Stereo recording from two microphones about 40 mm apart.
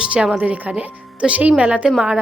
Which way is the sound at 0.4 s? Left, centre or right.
Right.